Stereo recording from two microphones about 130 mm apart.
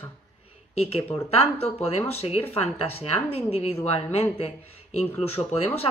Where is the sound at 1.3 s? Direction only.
50° left (ahead or behind).